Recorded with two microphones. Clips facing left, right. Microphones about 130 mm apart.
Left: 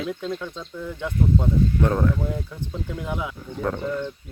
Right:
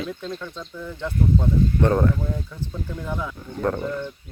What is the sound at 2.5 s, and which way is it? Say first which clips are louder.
Speech: left 1 dB; 10° left (ahead or behind).